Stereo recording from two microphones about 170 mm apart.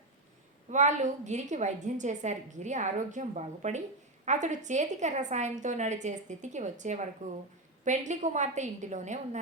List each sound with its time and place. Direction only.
0.7 s a woman's voice: 45° right (ahead or behind)